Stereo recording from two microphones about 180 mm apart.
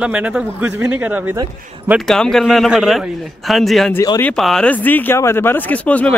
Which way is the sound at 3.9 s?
20° left (ahead or behind).